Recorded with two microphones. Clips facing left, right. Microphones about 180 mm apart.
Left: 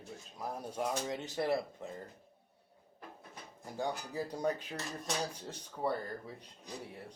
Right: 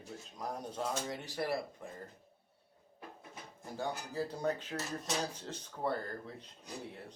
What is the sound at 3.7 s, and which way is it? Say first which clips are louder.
Speech: left 1 dB; 15° left (ahead or behind).